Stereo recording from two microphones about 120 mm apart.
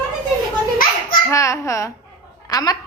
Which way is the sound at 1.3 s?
25° left (ahead or behind).